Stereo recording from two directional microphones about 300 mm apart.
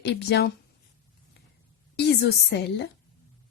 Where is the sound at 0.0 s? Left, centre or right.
Left.